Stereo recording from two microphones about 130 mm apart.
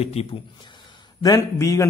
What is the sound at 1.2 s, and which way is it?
Speech, 20° left (ahead or behind).